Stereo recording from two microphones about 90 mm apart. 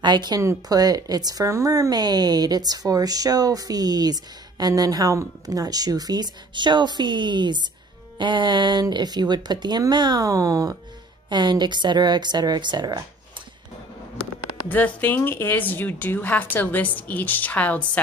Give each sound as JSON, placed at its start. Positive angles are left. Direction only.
{"t": 0.0, "sound": "speech", "side_deg": -55}
{"t": 8.2, "sound": "music", "side_deg": -60}
{"t": 8.9, "sound": "speech", "side_deg": -50}
{"t": 11.2, "sound": "speech", "side_deg": -55}
{"t": 14.7, "sound": "a woman's voice", "side_deg": 20}